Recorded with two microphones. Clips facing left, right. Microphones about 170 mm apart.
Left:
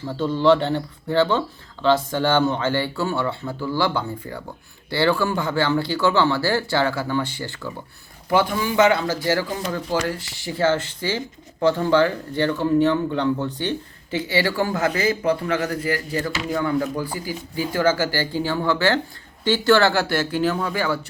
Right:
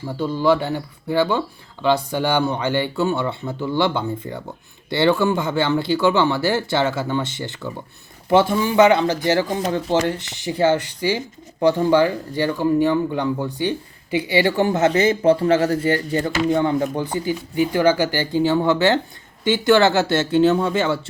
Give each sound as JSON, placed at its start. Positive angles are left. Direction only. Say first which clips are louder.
{"t": 0.0, "sound": "speech", "louder": "left 1 dB", "side_deg": -10}